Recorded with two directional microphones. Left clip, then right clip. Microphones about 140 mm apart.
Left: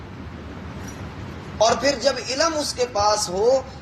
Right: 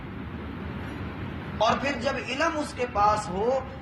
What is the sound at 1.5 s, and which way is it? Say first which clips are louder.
A woman's voice: left 6 dB; 35° left (ahead or behind).